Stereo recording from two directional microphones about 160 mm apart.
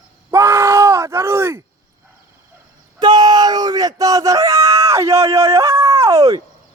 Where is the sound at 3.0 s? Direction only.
25° right (ahead or behind).